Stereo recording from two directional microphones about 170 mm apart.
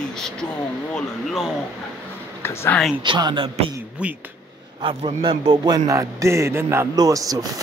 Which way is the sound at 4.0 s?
5° right (ahead or behind).